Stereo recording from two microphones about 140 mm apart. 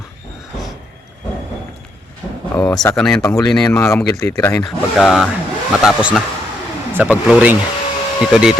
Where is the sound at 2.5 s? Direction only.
10° left (ahead or behind).